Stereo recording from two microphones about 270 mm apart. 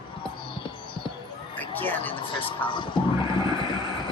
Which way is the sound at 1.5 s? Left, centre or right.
Centre.